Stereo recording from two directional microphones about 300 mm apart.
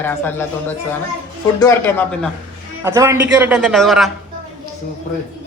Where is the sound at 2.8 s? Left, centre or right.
Centre.